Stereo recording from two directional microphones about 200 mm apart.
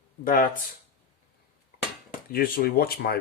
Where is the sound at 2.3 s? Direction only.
45° left (ahead or behind).